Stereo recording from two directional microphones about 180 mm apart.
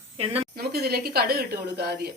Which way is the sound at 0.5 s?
60° right (ahead or behind).